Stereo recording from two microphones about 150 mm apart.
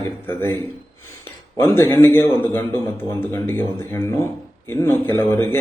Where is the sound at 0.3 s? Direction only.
15° left (ahead or behind).